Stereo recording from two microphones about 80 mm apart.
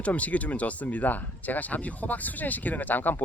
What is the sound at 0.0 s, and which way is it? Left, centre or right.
Speech, centre.